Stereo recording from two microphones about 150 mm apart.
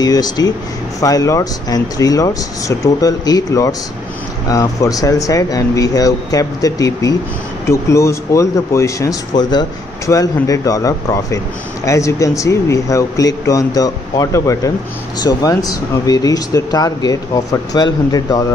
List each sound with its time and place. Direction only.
0.0 s speech: 25° left (ahead or behind)